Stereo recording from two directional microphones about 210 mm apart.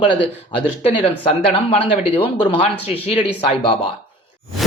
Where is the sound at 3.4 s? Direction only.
25° left (ahead or behind).